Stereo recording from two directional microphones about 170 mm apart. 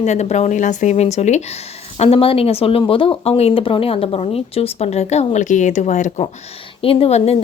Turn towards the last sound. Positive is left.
turn(degrees=35)  # may be behind; listen again after turning